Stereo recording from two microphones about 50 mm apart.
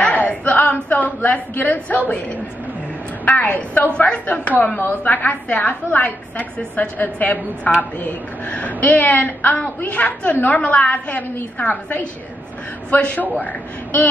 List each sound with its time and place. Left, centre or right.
0.0 s a sound: left
0.8 s a woman's voice: left
3.3 s a woman's voice: left